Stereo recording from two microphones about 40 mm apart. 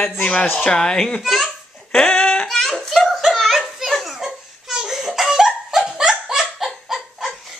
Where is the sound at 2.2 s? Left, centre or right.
Left.